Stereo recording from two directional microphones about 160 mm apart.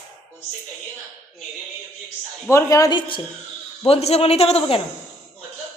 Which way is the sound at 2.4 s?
20° left (ahead or behind).